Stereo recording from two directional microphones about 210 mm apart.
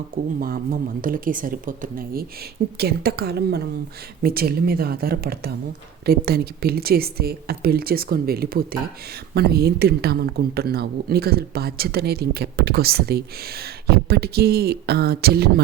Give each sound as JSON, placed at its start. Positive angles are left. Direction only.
{"t": 0.3, "sound": "speech", "side_deg": -45}